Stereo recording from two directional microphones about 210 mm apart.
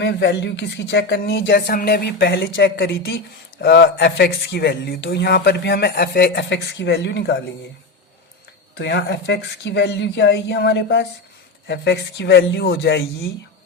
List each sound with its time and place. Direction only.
0.0 s speech: 55° left (ahead or behind)
8.8 s speech: 55° left (ahead or behind)